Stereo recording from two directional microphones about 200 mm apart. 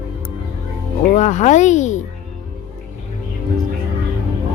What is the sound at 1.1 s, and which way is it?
Speech, 35° left (ahead or behind).